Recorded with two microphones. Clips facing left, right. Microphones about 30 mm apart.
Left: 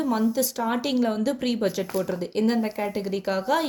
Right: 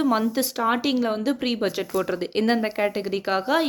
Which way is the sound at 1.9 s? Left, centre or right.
Right.